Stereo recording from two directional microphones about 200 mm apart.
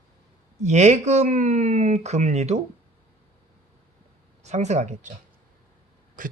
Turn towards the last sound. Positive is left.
turn(degrees=-40)  # may be behind; listen again after turning